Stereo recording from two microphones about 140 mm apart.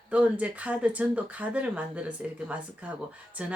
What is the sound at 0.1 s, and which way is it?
Speech, 10° right (ahead or behind).